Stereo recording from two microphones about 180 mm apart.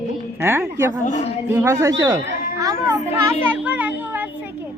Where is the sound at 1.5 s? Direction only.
15° right (ahead or behind).